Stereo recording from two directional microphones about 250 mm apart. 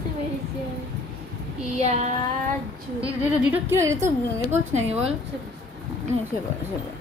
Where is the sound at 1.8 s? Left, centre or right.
Right.